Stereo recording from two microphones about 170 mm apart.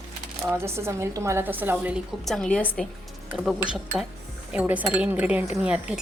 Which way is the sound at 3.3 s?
5° right (ahead or behind).